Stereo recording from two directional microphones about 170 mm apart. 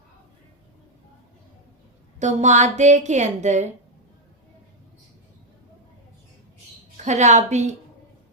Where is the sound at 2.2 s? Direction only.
45° right (ahead or behind).